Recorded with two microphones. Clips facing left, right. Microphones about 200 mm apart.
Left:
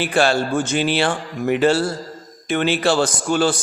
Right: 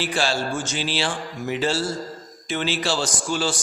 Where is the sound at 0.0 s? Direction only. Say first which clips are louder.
Left 6 dB; 60° left (ahead or behind).